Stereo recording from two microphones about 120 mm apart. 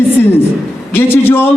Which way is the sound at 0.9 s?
20° left (ahead or behind).